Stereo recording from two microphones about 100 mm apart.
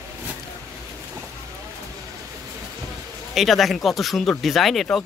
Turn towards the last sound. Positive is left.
turn(degrees=0)  # may be behind; listen again after turning